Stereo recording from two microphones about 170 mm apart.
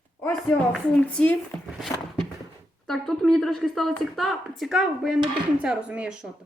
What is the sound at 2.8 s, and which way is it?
A woman's voice, centre (ahead or behind).